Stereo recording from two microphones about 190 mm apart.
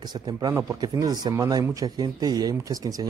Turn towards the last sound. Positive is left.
turn(degrees=-20)  # may be behind; listen again after turning